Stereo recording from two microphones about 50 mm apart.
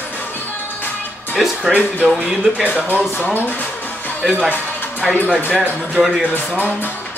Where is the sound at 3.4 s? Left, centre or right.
Left.